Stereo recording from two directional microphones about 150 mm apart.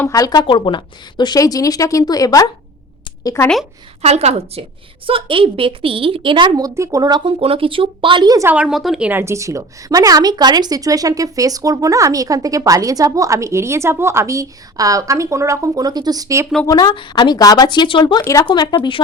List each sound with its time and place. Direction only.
0.0 s speech: 25° left (ahead or behind)
4.0 s a woman's voice: 45° right (ahead or behind); by 8.4 s 30° right (ahead or behind)
8.4 s a woman's voice: 5° right (ahead or behind); by 16.5 s 20° right (ahead or behind)
16.6 s speech: 25° left (ahead or behind)